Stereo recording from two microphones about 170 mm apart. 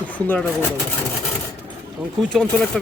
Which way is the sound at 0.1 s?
10° left (ahead or behind).